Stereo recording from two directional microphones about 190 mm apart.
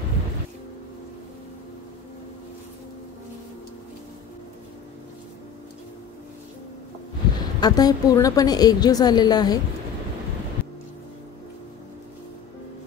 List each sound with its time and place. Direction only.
7.3 s a woman's voice: 20° left (ahead or behind)